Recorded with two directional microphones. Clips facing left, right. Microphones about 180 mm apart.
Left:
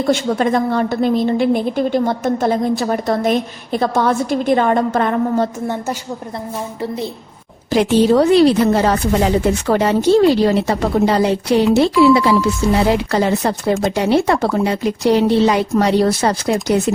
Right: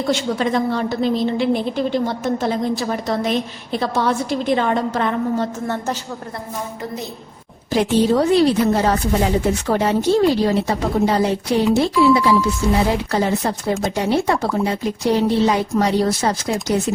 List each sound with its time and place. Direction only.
0.1 s a woman's voice: 55° left (ahead or behind)
5.6 s a woman's voice: 15° left (ahead or behind)
7.7 s speech: 80° left; by 16.8 s 65° left (ahead or behind)